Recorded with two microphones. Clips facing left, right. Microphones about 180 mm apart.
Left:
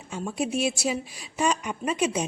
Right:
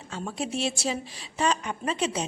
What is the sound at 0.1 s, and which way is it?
A woman's voice, 10° left (ahead or behind).